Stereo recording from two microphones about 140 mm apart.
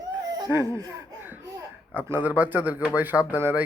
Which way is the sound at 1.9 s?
15° right (ahead or behind).